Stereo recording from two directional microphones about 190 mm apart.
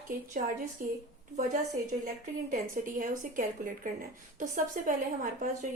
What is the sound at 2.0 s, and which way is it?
A woman's voice, 45° right (ahead or behind).